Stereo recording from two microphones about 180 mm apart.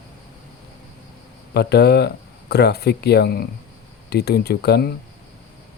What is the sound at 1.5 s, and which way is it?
Speech, 65° left (ahead or behind).